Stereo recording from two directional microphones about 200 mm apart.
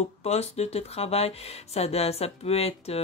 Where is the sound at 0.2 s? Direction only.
30° left (ahead or behind).